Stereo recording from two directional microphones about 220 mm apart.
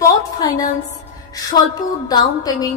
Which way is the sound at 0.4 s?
15° left (ahead or behind).